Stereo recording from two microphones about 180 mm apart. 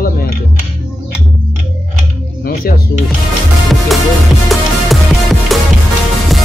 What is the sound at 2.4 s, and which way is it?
Music, 55° left (ahead or behind).